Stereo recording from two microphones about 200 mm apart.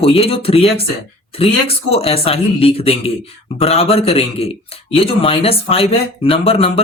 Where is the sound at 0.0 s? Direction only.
30° left (ahead or behind).